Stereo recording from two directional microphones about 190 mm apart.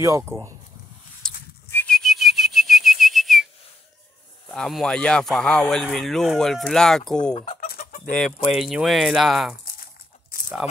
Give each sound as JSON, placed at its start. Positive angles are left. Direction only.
{"t": 0.0, "sound": "speech", "side_deg": -15}
{"t": 1.2, "sound": "a sound", "side_deg": 5}
{"t": 1.7, "sound": "whistling", "side_deg": 5}
{"t": 4.5, "sound": "speech", "side_deg": 0}
{"t": 7.6, "sound": "chicken", "side_deg": 50}
{"t": 8.1, "sound": "speech", "side_deg": 5}